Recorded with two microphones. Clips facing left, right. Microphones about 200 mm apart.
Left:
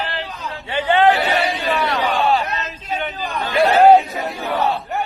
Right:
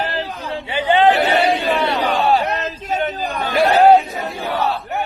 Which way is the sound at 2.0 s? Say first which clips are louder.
Right 2 dB; 40° right (ahead or behind).